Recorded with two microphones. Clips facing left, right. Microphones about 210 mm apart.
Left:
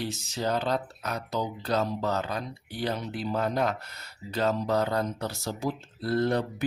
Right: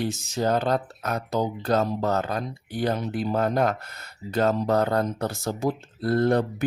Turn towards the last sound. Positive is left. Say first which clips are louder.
# right 4 dB
turn(degrees=-50)  # may be behind; listen again after turning